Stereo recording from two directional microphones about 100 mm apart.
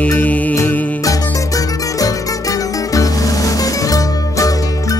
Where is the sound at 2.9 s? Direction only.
35° left (ahead or behind).